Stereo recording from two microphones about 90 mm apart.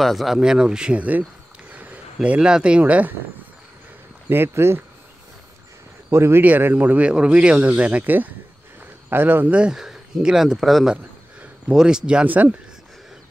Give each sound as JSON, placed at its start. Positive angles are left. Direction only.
{"t": 0.0, "sound": "speech", "side_deg": 0}
{"t": 1.7, "sound": "a sound", "side_deg": -15}
{"t": 2.2, "sound": "speech", "side_deg": -10}
{"t": 4.3, "sound": "speech", "side_deg": -25}
{"t": 6.0, "sound": "speech", "side_deg": -25}